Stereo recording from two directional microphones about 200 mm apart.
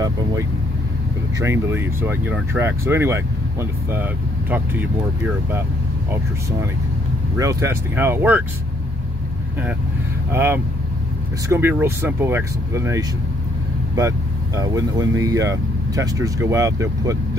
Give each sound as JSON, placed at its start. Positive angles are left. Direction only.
{"t": 0.0, "sound": "speech", "side_deg": -20}
{"t": 7.3, "sound": "speech", "side_deg": -15}
{"t": 10.3, "sound": "speech", "side_deg": -10}